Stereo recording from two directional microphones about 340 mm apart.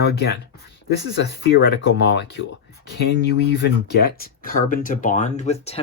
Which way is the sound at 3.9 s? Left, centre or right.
Left.